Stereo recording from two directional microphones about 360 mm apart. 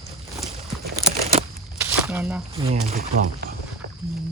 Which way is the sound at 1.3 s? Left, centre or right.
Centre.